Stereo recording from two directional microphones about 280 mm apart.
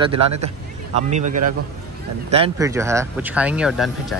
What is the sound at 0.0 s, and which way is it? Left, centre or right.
A man's voice, centre.